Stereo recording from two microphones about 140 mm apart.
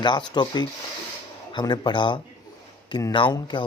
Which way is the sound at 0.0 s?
30° left (ahead or behind).